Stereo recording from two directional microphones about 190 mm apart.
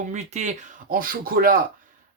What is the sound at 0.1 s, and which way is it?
Speech, 35° right (ahead or behind).